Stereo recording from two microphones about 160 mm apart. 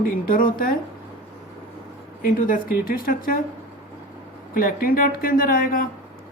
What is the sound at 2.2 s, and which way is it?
A woman's voice, 60° left (ahead or behind).